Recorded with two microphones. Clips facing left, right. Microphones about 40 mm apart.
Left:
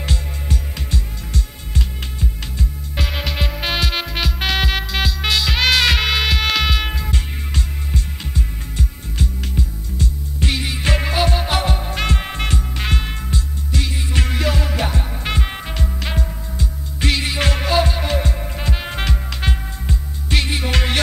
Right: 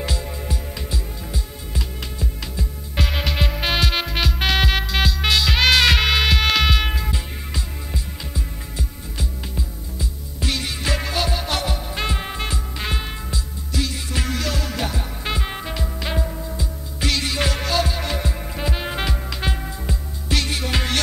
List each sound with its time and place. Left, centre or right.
0.0 s music: left
3.0 s music: centre
7.1 s music: left
10.4 s music: centre
10.8 s music: left
11.9 s music: left
13.7 s music: left
15.2 s music: left
17.0 s music: centre
18.3 s music: centre
19.4 s music: left